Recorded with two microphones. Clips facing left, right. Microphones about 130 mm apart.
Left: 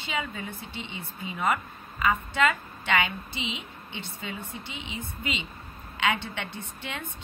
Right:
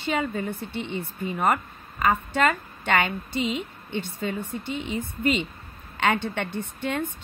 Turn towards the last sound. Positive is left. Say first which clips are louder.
# right 9 dB
turn(degrees=-50)  # may be behind; listen again after turning